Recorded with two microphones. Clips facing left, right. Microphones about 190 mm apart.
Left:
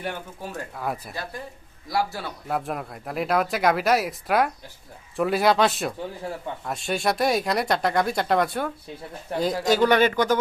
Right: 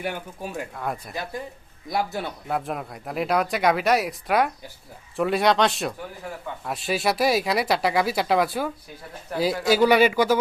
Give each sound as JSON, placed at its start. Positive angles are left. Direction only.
{"t": 0.0, "sound": "speech", "side_deg": -10}
{"t": 0.8, "sound": "speech", "side_deg": 0}
{"t": 1.1, "sound": "speech", "side_deg": -15}
{"t": 2.5, "sound": "speech", "side_deg": 0}
{"t": 9.3, "sound": "speech", "side_deg": 30}
{"t": 9.6, "sound": "speech", "side_deg": -10}